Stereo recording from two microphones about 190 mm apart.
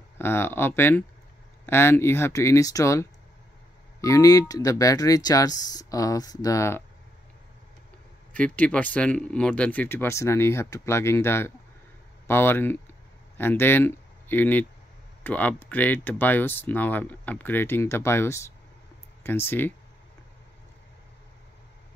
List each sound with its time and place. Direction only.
0.2 s speech: 10° left (ahead or behind)
8.3 s speech: 5° left (ahead or behind)